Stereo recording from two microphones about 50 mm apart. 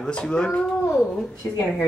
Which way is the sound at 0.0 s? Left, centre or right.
Centre.